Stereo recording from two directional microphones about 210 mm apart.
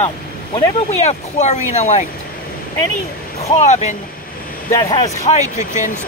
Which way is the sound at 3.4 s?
30° left (ahead or behind).